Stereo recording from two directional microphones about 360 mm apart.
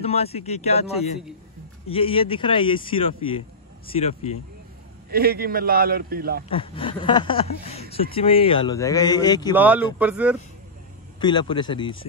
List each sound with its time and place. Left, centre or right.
0.0 s a man's voice: centre
5.1 s a man's voice: right
6.5 s a man's voice: centre
9.5 s speech: centre
11.1 s a man's voice: centre